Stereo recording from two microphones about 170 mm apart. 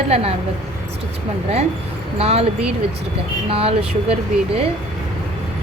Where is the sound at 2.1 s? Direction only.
40° right (ahead or behind).